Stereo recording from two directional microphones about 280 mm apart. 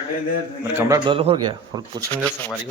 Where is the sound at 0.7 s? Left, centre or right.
Centre.